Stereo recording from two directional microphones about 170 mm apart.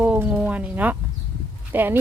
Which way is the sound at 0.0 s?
10° right (ahead or behind).